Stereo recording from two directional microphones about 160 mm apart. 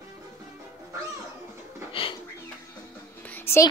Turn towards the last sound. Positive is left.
turn(degrees=15)  # may be behind; listen again after turning